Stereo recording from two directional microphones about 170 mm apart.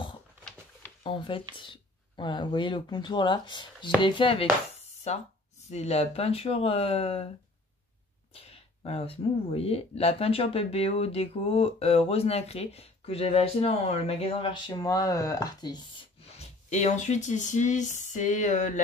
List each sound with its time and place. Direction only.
1.0 s speech: 30° left (ahead or behind); by 18.8 s 45° left (ahead or behind)